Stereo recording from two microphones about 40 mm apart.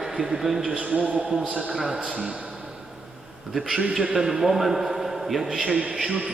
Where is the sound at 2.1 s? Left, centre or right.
Right.